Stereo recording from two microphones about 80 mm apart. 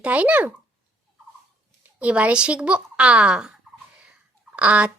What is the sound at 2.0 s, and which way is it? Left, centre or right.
Speech, centre.